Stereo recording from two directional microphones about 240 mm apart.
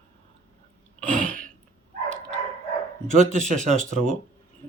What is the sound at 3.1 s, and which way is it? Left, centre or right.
Speech, right.